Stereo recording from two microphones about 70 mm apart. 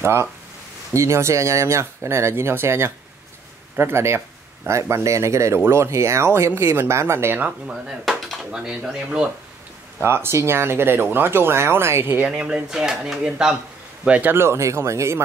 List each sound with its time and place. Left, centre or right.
0.0 s speech: right
7.3 s speech: right
7.7 s speech: centre
9.9 s speech: right
12.2 s speech: centre
14.3 s speech: right